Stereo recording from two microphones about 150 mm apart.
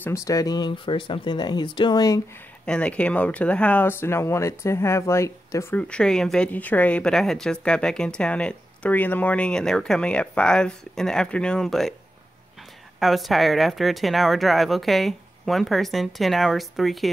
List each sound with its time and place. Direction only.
0.0 s speech: 20° left (ahead or behind)
2.6 s speech: 5° left (ahead or behind)
13.0 s speech: centre (ahead or behind)